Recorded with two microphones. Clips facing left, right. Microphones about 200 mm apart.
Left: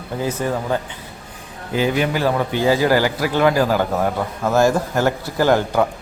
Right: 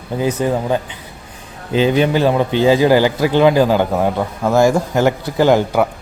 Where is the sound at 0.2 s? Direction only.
15° right (ahead or behind).